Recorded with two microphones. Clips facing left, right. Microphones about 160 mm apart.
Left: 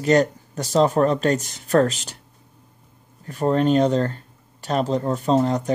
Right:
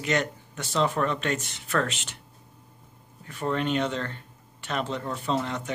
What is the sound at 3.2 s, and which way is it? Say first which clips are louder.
Speech: left 8 dB; 40° left (ahead or behind).